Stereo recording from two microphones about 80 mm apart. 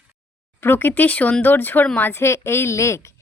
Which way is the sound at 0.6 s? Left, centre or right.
Left.